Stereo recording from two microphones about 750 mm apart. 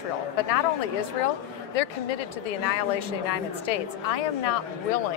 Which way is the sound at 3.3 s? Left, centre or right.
Left.